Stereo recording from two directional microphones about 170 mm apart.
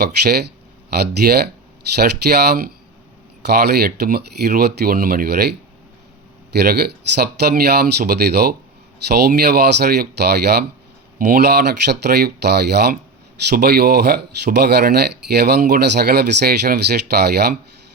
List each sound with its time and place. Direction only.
0.9 s speech: 70° right (ahead or behind)